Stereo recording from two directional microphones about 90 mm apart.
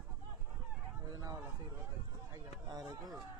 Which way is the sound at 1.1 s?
50° right (ahead or behind).